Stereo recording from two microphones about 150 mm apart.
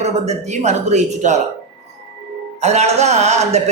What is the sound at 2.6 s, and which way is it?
A man's voice, 50° right (ahead or behind).